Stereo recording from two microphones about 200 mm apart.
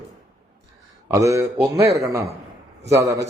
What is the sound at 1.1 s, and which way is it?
A man's voice, 15° right (ahead or behind).